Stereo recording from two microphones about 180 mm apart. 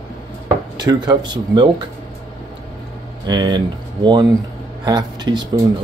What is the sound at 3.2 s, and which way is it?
Speech, 25° right (ahead or behind).